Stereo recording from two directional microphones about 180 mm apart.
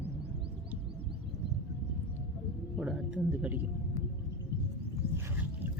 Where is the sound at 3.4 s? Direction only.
10° right (ahead or behind).